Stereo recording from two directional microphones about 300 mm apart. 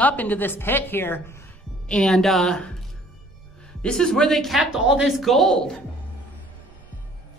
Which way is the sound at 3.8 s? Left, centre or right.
Centre.